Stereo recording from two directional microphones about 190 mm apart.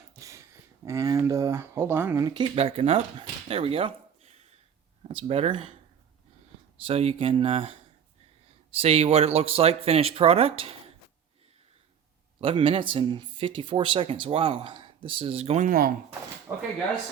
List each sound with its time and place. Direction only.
0.1 s a sound: 15° right (ahead or behind)
0.9 s speech: 15° right (ahead or behind)
5.0 s speech: 30° right (ahead or behind)
6.8 s speech: 30° right (ahead or behind)
8.8 s speech: 30° right (ahead or behind)
12.4 s speech: 25° right (ahead or behind); by 15.9 s 45° right (ahead or behind)
16.5 s speech: 15° right (ahead or behind)